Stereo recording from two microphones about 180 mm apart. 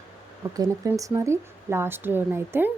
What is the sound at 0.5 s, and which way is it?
A woman's voice, 20° right (ahead or behind).